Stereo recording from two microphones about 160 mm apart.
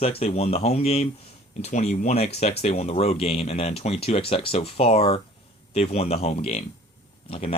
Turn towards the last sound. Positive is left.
turn(degrees=40)  # may be behind; listen again after turning